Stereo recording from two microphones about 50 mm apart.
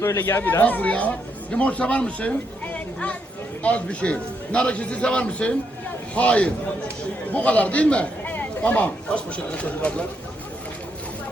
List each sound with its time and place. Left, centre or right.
0.2 s speech: left
0.6 s a man's voice: left